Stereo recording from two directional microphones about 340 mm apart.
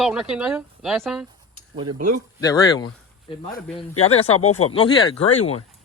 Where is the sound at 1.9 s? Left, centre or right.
Right.